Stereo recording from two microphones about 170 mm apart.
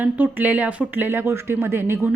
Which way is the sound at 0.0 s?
10° right (ahead or behind).